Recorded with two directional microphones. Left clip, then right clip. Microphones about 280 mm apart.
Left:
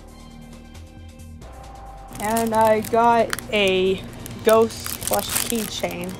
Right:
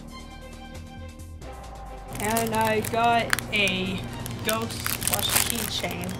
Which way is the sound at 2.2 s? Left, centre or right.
Centre.